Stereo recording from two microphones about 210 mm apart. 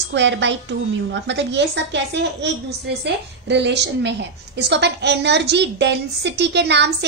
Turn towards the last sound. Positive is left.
turn(degrees=-55)  # may be behind; listen again after turning